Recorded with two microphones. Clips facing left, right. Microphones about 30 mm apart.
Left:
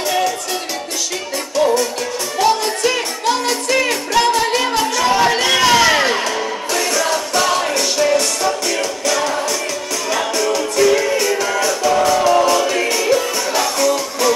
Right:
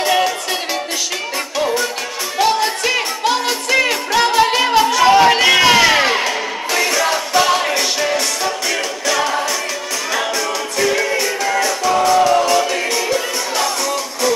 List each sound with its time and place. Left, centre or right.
0.0 s music: right
2.3 s music: centre